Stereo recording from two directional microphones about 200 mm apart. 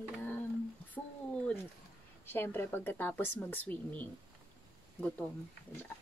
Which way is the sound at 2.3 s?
10° left (ahead or behind).